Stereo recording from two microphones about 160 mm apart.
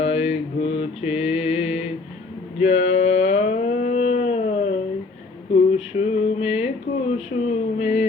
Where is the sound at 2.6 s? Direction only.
45° left (ahead or behind).